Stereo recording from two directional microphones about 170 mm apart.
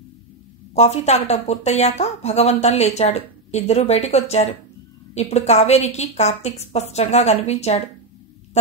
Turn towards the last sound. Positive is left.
turn(degrees=40)  # may be behind; listen again after turning